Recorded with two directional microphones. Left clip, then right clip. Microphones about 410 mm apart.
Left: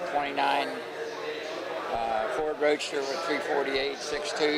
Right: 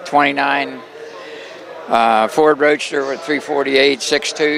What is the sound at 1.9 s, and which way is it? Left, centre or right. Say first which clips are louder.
A man's voice: right 17 dB; right.